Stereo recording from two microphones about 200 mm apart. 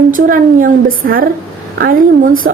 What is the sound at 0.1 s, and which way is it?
A woman's voice, 45° right (ahead or behind).